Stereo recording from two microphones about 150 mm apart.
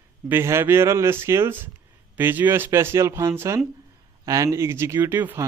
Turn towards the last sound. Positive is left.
turn(degrees=-15)  # may be behind; listen again after turning